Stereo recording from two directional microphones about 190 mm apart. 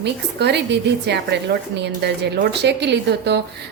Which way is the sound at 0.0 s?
60° right (ahead or behind).